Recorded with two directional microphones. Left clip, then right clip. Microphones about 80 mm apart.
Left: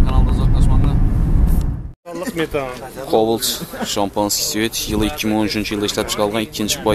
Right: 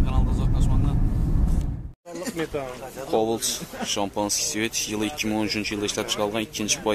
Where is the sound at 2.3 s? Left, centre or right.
Left.